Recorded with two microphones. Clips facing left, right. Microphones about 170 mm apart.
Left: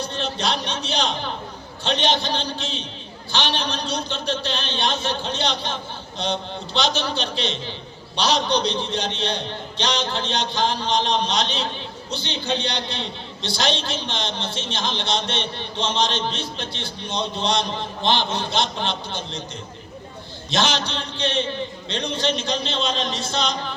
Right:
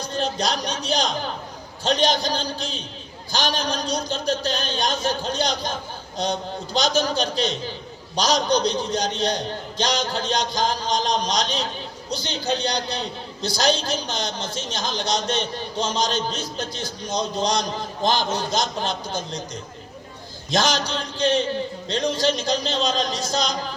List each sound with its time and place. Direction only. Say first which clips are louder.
0.0 s a man's voice: right 1 dB; 40° right (ahead or behind)
20.5 s a man's voice: right 1 dB; 40° right (ahead or behind)